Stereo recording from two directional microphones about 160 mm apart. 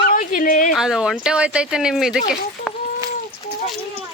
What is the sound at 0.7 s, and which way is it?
Speech, 5° right (ahead or behind).